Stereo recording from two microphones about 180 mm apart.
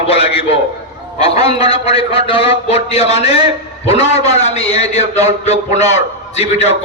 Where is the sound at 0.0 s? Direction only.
30° left (ahead or behind).